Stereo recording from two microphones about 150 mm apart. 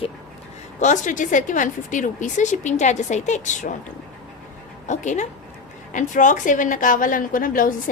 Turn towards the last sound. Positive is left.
turn(degrees=70)  # may be behind; listen again after turning